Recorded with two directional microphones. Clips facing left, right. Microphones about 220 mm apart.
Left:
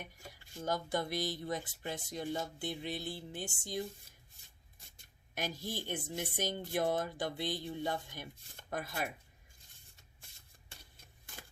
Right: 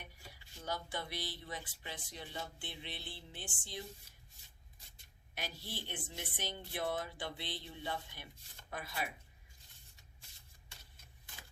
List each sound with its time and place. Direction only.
0.0 s speech: 45° left (ahead or behind)
5.3 s speech: 45° left (ahead or behind)